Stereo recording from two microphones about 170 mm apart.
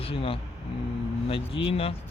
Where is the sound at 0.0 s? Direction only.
30° left (ahead or behind).